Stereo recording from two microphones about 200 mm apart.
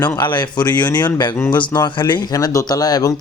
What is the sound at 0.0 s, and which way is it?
Speech, 20° left (ahead or behind).